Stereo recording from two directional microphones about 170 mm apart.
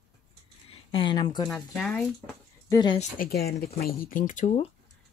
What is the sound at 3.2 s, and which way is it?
Speech, 65° left (ahead or behind).